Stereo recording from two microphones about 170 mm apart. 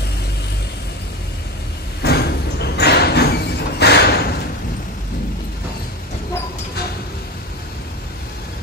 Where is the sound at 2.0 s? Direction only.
70° left (ahead or behind).